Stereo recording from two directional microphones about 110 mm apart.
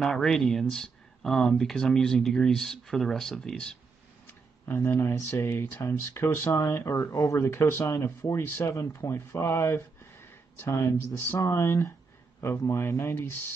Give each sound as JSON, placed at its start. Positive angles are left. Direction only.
{"t": 0.0, "sound": "speech", "side_deg": 5}
{"t": 4.3, "sound": "speech", "side_deg": 20}